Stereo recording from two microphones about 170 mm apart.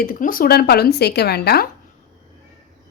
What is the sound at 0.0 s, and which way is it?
Speech, 55° left (ahead or behind).